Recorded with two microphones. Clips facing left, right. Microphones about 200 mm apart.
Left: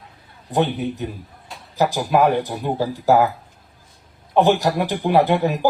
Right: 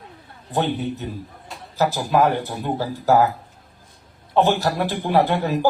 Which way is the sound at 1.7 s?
15° left (ahead or behind).